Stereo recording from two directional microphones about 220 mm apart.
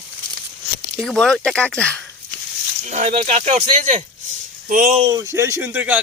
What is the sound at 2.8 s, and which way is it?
Speech, 30° right (ahead or behind).